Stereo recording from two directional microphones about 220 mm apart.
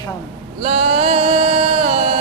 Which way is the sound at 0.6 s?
30° right (ahead or behind).